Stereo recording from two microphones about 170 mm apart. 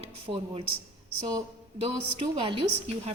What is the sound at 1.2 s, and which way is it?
Speech, 25° right (ahead or behind).